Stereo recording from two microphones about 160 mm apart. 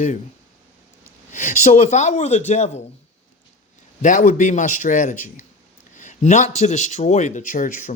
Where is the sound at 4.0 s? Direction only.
55° left (ahead or behind).